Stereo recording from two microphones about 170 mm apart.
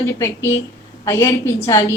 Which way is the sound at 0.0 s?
15° left (ahead or behind).